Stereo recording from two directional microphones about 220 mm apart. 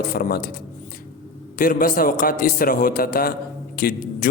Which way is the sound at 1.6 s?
40° left (ahead or behind).